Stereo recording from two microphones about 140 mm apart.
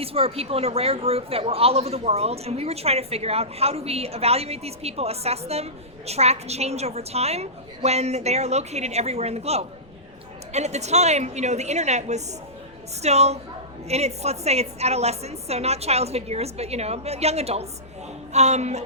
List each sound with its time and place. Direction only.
0.0 s a woman's voice: 45° right (ahead or behind)